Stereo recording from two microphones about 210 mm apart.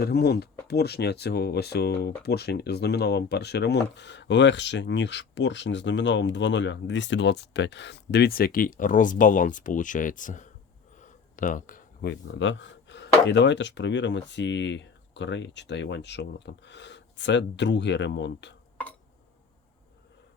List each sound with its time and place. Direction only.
0.0 s speech: 50° left (ahead or behind)
11.0 s a sound: 40° left (ahead or behind)
12.1 s speech: 60° left (ahead or behind)